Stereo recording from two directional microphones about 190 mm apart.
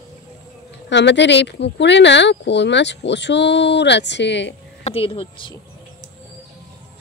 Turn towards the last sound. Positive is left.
turn(degrees=25)  # may be behind; listen again after turning